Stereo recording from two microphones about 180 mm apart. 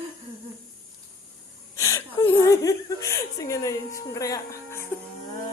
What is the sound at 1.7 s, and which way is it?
Chuckle, 15° left (ahead or behind).